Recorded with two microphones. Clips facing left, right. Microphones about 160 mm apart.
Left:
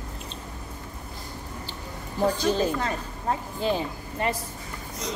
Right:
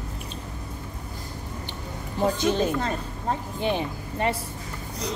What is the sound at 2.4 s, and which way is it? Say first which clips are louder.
Speech: right 1 dB; 20° right (ahead or behind).